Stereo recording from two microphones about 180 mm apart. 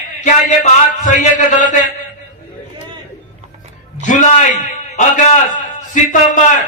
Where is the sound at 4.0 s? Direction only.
45° left (ahead or behind).